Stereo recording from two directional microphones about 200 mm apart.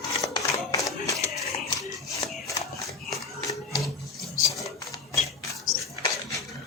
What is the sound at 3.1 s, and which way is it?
Music, centre (ahead or behind).